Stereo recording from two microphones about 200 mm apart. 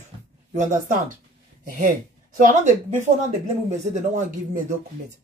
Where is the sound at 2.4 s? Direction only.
40° right (ahead or behind).